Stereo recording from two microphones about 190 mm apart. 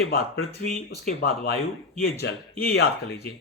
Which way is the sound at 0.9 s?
55° left (ahead or behind).